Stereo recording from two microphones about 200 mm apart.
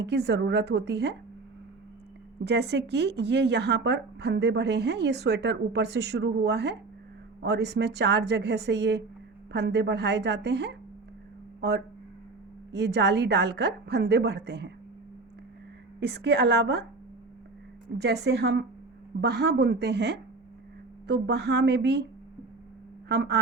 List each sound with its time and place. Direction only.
0.0 s speech: 55° right (ahead or behind)
2.4 s speech: 55° right (ahead or behind)
12.7 s speech: 60° right (ahead or behind)
16.0 s speech: 55° right (ahead or behind)
17.9 s speech: 55° right (ahead or behind)
23.0 s speech: 55° right (ahead or behind)